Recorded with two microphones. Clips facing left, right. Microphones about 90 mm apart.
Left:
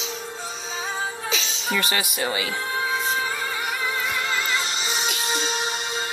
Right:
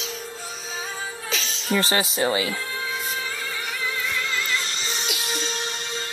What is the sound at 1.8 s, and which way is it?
Speech, 30° right (ahead or behind).